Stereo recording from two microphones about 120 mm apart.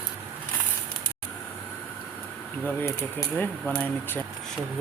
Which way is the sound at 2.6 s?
20° left (ahead or behind).